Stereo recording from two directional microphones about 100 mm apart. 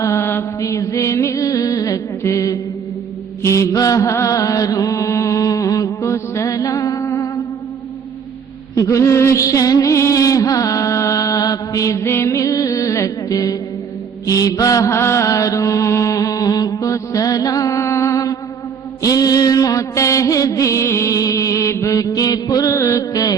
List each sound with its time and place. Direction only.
0.0 s mantra: 25° left (ahead or behind)
8.7 s mantra: 35° left (ahead or behind)